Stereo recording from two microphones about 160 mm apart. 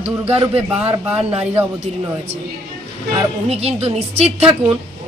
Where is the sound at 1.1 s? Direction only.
10° right (ahead or behind).